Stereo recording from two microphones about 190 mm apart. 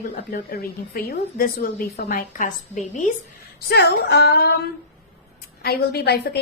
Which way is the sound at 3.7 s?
60° left (ahead or behind).